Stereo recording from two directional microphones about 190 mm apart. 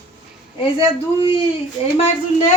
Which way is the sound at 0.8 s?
25° left (ahead or behind).